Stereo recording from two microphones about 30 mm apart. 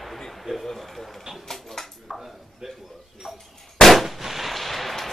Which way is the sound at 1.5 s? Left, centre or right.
Centre.